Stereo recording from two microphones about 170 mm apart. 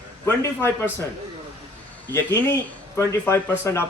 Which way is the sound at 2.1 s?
10° left (ahead or behind).